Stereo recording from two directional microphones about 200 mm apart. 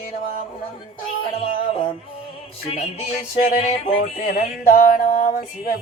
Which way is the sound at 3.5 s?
40° left (ahead or behind).